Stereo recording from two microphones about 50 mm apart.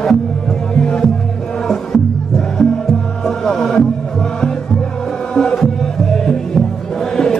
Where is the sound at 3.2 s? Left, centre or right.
Centre.